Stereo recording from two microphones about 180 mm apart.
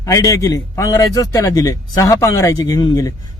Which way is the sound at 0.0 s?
20° left (ahead or behind).